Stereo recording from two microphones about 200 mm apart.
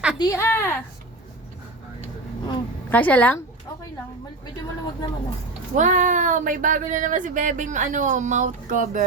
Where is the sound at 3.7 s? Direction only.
20° left (ahead or behind).